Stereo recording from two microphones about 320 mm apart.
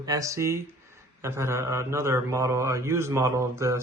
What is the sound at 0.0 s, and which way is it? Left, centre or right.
Speech, centre.